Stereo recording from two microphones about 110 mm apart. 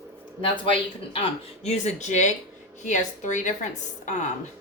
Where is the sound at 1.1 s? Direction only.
75° left (ahead or behind).